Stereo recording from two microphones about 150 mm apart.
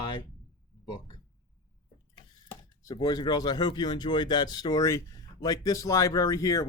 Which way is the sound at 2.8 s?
25° left (ahead or behind).